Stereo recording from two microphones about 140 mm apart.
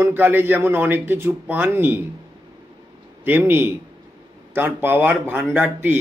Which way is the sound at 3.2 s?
15° right (ahead or behind).